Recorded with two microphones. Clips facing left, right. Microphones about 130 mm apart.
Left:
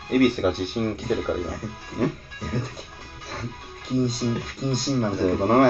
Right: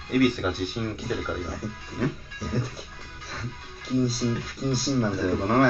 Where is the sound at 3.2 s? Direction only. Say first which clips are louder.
Left 4 dB; 55° left (ahead or behind).